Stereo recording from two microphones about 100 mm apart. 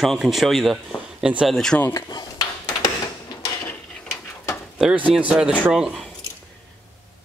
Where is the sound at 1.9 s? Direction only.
40° left (ahead or behind).